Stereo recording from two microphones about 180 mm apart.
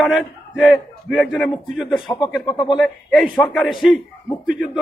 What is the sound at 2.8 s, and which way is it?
A man's voice, centre (ahead or behind).